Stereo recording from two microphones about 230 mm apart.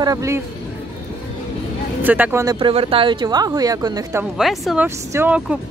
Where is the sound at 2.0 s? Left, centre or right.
Centre.